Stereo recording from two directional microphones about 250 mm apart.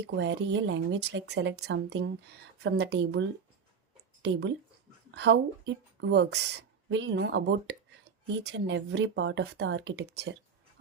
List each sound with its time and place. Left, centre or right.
0.0 s speech: right